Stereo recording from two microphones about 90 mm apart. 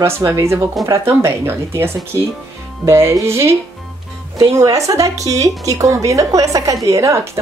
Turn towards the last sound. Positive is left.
turn(degrees=-35)  # may be behind; listen again after turning